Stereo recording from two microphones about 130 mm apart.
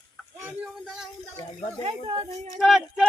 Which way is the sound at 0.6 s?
Centre (ahead or behind).